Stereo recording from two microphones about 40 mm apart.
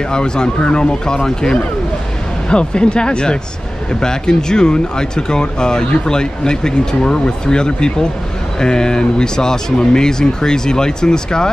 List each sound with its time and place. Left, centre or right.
0.1 s speech: left